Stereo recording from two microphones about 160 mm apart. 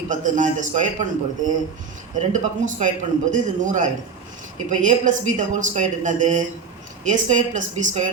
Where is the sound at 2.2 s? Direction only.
50° right (ahead or behind).